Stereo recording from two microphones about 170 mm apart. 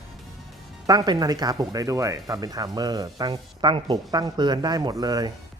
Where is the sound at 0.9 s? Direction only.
25° right (ahead or behind).